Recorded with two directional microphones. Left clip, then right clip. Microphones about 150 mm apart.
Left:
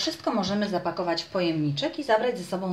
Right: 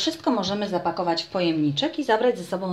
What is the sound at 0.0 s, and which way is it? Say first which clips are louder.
Speech: right 3 dB; 35° right (ahead or behind).